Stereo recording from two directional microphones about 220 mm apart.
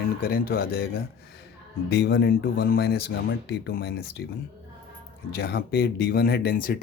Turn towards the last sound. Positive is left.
turn(degrees=40)  # may be behind; listen again after turning